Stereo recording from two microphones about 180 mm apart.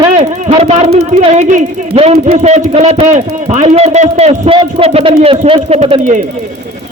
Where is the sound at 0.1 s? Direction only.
35° right (ahead or behind).